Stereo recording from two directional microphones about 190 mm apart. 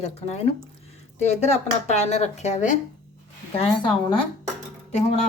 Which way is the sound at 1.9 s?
35° left (ahead or behind).